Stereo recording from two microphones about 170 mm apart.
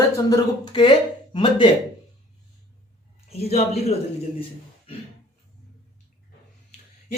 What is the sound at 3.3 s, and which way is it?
Speech, 35° left (ahead or behind).